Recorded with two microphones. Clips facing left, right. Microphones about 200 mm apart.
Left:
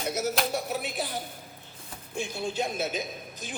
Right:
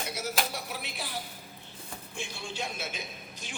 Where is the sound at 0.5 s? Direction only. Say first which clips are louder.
Left 8 dB; 45° left (ahead or behind).